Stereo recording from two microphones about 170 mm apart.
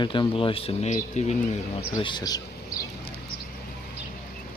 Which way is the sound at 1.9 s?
25° left (ahead or behind).